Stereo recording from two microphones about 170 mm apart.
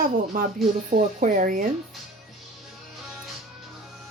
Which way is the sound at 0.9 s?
45° right (ahead or behind).